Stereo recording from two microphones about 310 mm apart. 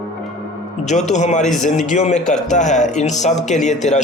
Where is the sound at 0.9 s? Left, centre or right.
Left.